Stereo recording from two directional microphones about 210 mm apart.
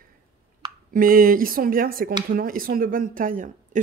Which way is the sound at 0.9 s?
40° right (ahead or behind).